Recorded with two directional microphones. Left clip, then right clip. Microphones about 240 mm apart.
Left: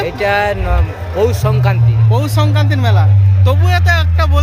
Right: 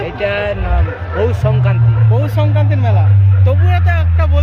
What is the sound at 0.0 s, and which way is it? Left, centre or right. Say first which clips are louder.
Speech: left 3 dB; centre.